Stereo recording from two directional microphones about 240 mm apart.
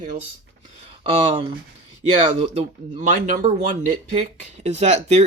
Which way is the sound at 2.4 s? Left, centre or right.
Right.